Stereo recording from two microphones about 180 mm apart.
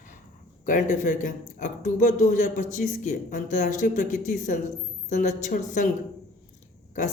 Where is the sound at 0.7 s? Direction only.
45° left (ahead or behind).